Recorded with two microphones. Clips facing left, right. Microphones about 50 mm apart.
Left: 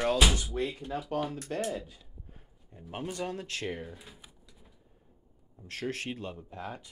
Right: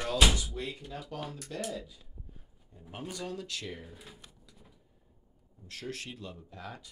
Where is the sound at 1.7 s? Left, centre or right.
Left.